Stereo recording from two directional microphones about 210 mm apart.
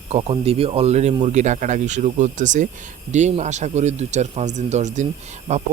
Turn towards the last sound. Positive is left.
turn(degrees=-30)  # may be behind; listen again after turning